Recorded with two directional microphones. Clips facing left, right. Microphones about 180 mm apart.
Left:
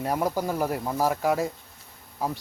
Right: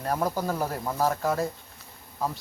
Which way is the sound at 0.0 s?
10° left (ahead or behind).